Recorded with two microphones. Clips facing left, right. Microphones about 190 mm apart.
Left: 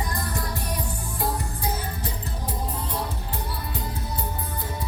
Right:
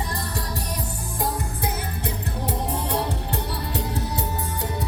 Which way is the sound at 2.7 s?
70° right (ahead or behind).